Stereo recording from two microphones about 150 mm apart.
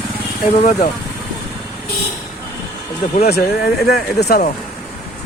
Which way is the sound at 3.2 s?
90° left.